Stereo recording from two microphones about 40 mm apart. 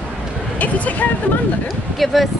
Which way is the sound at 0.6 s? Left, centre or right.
Left.